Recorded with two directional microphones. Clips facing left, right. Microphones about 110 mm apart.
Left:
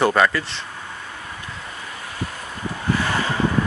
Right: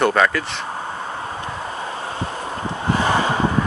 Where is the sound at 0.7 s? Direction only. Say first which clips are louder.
Right 8 dB; 35° right (ahead or behind).